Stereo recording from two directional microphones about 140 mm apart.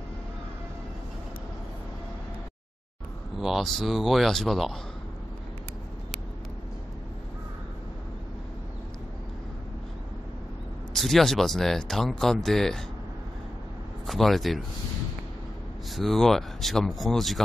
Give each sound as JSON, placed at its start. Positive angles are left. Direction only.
{"t": 3.3, "sound": "speech", "side_deg": 0}
{"t": 10.9, "sound": "speech", "side_deg": 0}
{"t": 14.0, "sound": "speech", "side_deg": 0}
{"t": 15.9, "sound": "speech", "side_deg": 0}